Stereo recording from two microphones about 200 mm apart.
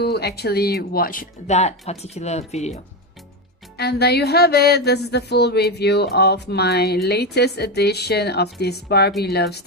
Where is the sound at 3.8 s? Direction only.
55° left (ahead or behind).